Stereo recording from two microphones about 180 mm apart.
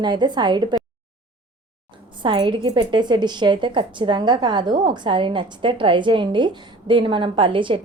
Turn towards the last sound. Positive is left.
turn(degrees=-30)  # may be behind; listen again after turning